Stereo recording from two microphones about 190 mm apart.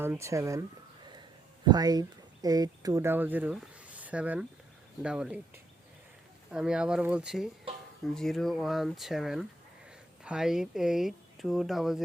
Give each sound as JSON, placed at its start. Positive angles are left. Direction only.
{"t": 0.0, "sound": "speech", "side_deg": -15}
{"t": 1.6, "sound": "speech", "side_deg": -20}
{"t": 6.5, "sound": "speech", "side_deg": -5}